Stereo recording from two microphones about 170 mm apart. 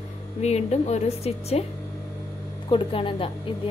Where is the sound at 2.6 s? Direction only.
30° left (ahead or behind).